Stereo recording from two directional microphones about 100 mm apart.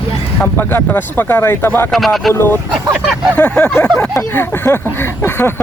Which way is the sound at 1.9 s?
Centre (ahead or behind).